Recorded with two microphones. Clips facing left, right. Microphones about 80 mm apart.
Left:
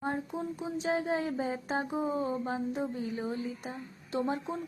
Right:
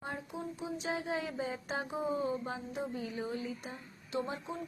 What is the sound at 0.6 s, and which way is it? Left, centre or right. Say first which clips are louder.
Speech: left 6 dB; left.